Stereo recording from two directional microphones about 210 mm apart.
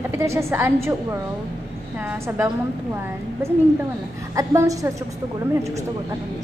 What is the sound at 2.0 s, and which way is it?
Speech, 10° right (ahead or behind).